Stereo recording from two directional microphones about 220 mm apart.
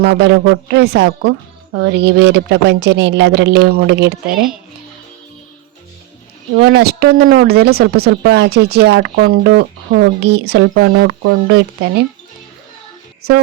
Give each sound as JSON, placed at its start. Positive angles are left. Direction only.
{"t": 0.0, "sound": "speech", "side_deg": -50}
{"t": 6.6, "sound": "speech", "side_deg": -50}